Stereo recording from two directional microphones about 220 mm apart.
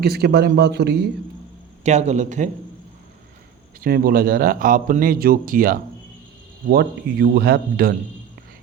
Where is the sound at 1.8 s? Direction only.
30° right (ahead or behind).